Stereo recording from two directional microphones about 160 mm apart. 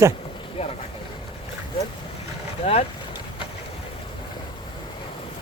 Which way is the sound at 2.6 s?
40° left (ahead or behind).